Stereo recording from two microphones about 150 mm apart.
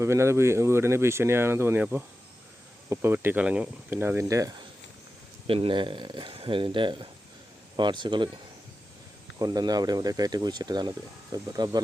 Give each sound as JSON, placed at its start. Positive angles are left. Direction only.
{"t": 0.0, "sound": "speech", "side_deg": -20}
{"t": 5.5, "sound": "speech", "side_deg": -35}
{"t": 9.4, "sound": "speech", "side_deg": -25}